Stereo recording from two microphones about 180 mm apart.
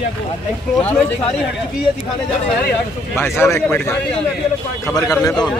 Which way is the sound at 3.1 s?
15° left (ahead or behind).